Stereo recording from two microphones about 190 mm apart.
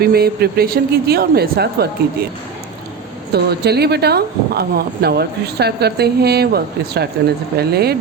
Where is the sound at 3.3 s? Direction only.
60° right (ahead or behind).